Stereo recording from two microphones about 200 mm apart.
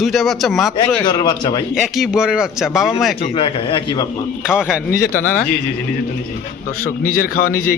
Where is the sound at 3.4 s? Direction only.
25° left (ahead or behind).